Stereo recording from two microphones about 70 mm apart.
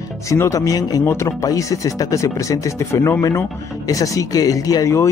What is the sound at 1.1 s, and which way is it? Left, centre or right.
Speech, left.